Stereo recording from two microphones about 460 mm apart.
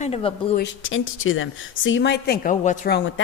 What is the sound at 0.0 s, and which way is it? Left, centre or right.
Speech, centre.